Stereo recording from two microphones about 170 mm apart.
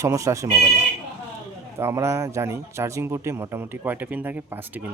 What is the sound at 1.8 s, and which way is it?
A man's voice, 15° right (ahead or behind).